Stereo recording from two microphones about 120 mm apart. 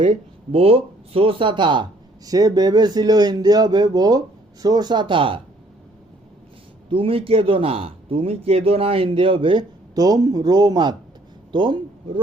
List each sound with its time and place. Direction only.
0.5 s speech: 55° right (ahead or behind)
6.9 s a man's voice: 50° right (ahead or behind)
9.9 s a man's voice: 30° right (ahead or behind)